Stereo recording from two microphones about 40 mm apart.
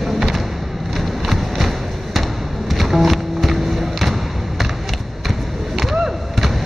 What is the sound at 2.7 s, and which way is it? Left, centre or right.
Music, centre.